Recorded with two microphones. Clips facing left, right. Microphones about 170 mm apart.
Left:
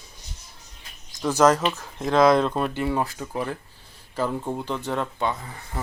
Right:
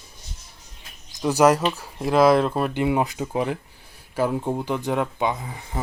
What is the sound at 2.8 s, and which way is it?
Speech, 15° right (ahead or behind).